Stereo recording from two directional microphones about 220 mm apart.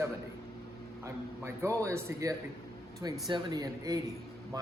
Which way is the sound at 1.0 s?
10° right (ahead or behind).